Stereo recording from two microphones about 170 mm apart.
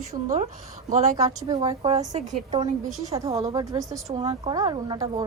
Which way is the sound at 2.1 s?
45° right (ahead or behind).